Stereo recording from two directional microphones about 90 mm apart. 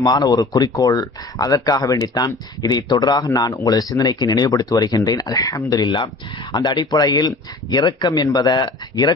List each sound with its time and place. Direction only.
0.0 s speech: 45° left (ahead or behind)